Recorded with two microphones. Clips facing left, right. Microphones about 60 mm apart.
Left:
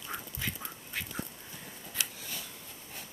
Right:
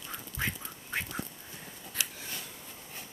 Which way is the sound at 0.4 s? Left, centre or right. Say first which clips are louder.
Right 4 dB; right.